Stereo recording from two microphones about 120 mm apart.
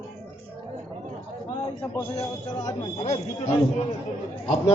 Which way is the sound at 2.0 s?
55° left (ahead or behind).